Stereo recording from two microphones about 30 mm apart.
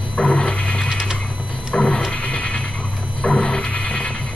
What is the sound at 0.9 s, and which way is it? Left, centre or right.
Mechanisms, centre.